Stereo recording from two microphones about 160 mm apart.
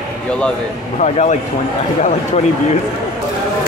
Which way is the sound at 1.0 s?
45° left (ahead or behind).